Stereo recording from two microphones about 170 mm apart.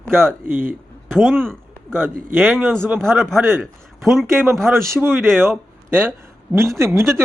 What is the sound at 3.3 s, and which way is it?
Speech, centre (ahead or behind).